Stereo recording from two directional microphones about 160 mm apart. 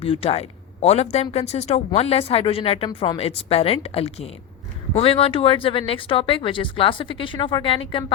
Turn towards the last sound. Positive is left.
turn(degrees=30)  # may be behind; listen again after turning